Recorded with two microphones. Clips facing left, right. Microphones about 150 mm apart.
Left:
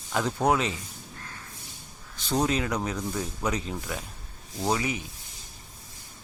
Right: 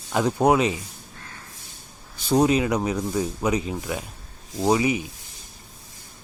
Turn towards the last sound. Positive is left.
turn(degrees=-15)  # may be behind; listen again after turning